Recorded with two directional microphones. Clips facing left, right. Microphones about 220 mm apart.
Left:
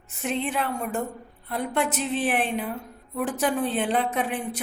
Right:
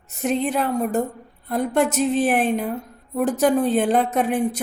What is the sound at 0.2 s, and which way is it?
A woman's voice, 40° right (ahead or behind).